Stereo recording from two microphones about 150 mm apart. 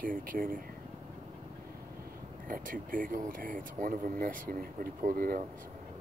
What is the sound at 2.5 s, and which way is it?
Speech, 65° right (ahead or behind).